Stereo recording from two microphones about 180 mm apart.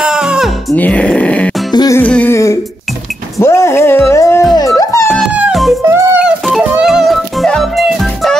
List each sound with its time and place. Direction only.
0.0 s music: 5° right (ahead or behind)
0.7 s speech: 10° left (ahead or behind)
1.7 s music: 20° left (ahead or behind)
2.0 s music: 10° left (ahead or behind)
3.3 s a sound: 15° left (ahead or behind)
4.6 s music: 20° left (ahead or behind)
5.1 s music: 5° right (ahead or behind)